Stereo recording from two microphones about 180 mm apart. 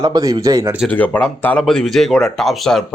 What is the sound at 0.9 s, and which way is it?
Speech, 10° left (ahead or behind).